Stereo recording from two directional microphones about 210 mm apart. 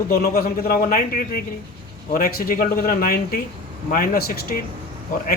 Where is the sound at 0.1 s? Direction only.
45° left (ahead or behind).